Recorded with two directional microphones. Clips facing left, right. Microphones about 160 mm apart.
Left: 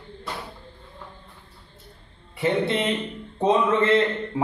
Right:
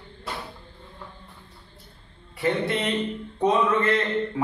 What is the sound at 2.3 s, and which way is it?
A man's voice, 20° left (ahead or behind).